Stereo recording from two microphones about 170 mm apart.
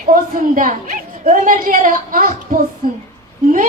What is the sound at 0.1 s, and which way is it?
A woman's voice, 50° right (ahead or behind).